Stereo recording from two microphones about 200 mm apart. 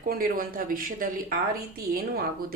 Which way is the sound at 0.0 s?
45° right (ahead or behind).